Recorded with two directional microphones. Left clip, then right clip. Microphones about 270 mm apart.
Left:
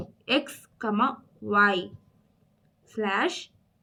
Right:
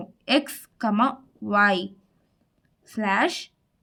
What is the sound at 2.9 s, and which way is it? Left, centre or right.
Speech, right.